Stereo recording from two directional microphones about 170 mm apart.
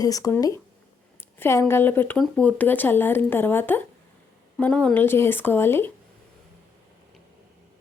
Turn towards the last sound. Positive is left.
turn(degrees=15)  # may be behind; listen again after turning